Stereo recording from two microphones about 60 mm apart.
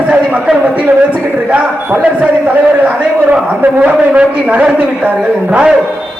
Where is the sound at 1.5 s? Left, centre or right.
Right.